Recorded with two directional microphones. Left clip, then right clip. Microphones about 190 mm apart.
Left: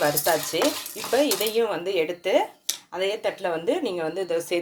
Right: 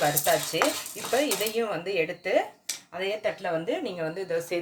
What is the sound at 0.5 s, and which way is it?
Speech, 25° left (ahead or behind).